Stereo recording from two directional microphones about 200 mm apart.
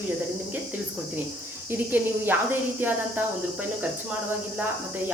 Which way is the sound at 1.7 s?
10° right (ahead or behind).